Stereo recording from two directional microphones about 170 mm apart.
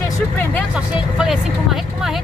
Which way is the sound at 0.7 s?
5° right (ahead or behind).